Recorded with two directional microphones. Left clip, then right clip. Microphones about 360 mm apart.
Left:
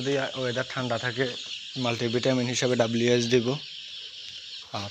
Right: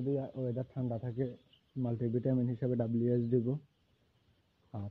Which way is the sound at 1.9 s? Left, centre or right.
Left.